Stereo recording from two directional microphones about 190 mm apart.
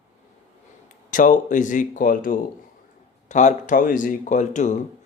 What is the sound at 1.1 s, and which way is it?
Speech, 45° left (ahead or behind).